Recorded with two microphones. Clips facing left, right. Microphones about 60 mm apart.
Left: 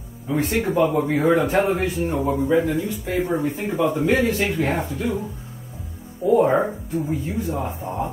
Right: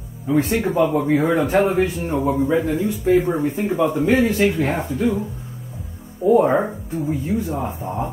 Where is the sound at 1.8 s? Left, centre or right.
Right.